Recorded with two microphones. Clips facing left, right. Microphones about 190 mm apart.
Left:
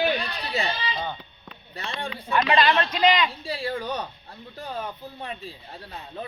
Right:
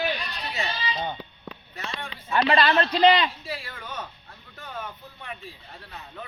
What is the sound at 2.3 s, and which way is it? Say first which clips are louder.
Speech: even; 35° right (ahead or behind).